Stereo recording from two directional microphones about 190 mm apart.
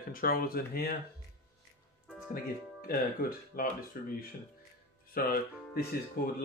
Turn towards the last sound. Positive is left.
turn(degrees=50)  # may be behind; listen again after turning